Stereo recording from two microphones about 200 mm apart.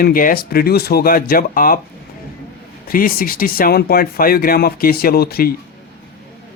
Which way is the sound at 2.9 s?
45° left (ahead or behind).